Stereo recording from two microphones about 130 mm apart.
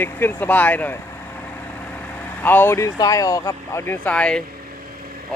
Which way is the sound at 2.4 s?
15° left (ahead or behind).